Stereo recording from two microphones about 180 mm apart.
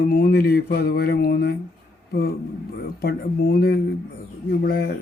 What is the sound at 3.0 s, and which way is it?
Speech, 60° left (ahead or behind).